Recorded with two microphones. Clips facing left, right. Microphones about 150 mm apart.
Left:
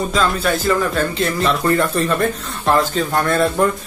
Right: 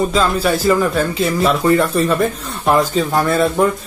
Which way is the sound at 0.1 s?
5° right (ahead or behind).